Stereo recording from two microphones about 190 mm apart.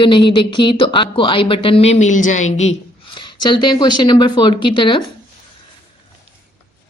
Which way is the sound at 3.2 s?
25° left (ahead or behind).